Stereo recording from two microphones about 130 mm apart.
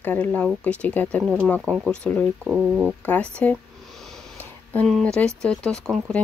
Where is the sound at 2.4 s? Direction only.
10° right (ahead or behind).